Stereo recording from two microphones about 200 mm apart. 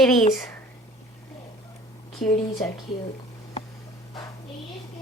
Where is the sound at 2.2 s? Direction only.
40° left (ahead or behind).